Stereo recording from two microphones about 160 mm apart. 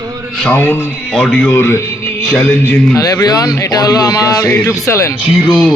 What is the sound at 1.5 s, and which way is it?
A man's voice, 15° left (ahead or behind).